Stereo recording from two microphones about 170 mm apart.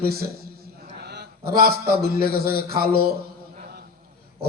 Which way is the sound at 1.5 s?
60° right (ahead or behind).